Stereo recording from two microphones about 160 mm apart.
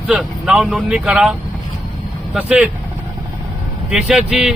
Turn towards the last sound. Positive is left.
turn(degrees=-5)  # may be behind; listen again after turning